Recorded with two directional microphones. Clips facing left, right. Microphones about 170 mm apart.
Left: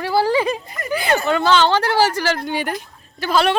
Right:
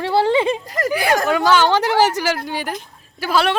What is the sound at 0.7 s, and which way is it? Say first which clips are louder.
Speech: right 9 dB; 90° right.